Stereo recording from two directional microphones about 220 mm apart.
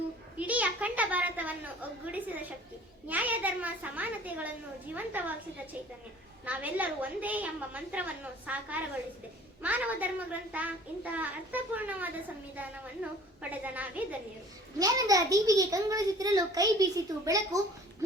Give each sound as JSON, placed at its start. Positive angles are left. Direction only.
{"t": 0.3, "sound": "a sound", "side_deg": -5}
{"t": 3.1, "sound": "a child's voice", "side_deg": -5}
{"t": 6.4, "sound": "a child's voice", "side_deg": -5}